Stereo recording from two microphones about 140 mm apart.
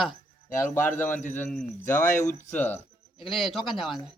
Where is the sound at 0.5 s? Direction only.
15° left (ahead or behind).